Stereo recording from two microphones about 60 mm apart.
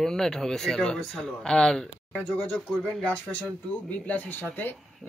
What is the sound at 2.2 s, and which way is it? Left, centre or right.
Speech, left.